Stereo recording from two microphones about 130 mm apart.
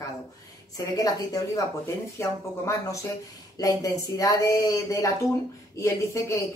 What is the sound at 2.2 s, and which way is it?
Speech, 20° left (ahead or behind).